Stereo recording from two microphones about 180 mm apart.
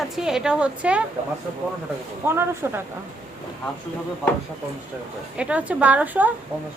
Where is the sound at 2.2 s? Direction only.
15° right (ahead or behind).